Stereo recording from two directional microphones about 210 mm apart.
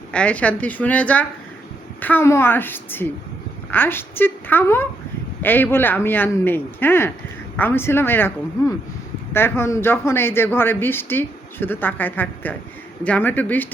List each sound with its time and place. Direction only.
0.1 s a man's voice: 5° left (ahead or behind)